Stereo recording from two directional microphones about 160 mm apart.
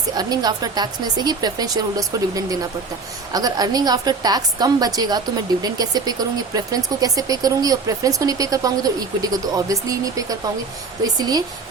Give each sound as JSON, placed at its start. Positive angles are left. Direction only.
{"t": 0.2, "sound": "speech", "side_deg": -25}